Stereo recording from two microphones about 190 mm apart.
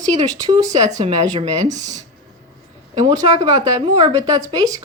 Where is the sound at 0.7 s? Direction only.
40° right (ahead or behind).